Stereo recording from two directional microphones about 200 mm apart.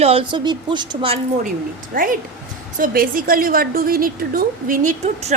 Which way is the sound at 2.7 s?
45° right (ahead or behind).